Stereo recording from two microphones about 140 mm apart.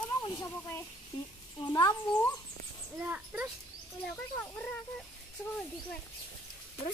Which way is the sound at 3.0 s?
10° right (ahead or behind).